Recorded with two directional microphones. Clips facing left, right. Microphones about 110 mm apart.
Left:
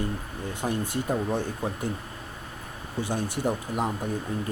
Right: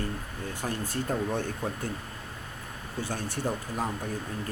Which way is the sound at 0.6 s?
15° left (ahead or behind).